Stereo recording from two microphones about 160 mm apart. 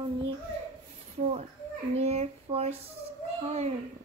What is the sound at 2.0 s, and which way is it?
Speech, 40° right (ahead or behind).